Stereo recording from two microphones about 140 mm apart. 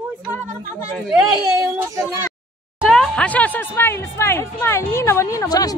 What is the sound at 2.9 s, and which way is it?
Speech, 5° left (ahead or behind).